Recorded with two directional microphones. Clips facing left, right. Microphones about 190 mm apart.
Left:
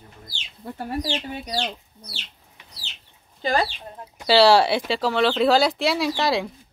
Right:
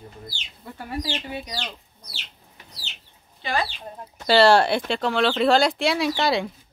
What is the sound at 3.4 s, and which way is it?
Speech, 40° left (ahead or behind).